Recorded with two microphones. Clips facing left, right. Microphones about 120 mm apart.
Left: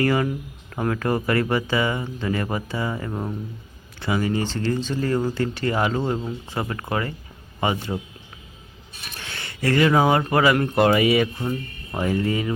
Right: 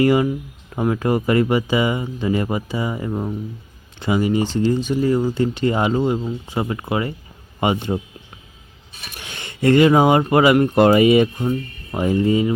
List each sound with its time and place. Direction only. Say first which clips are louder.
0.0 s a man's voice: right 5 dB; 15° right (ahead or behind)
9.1 s speech: right 2 dB; 15° right (ahead or behind)
11.4 s speech: right 5 dB; 15° right (ahead or behind)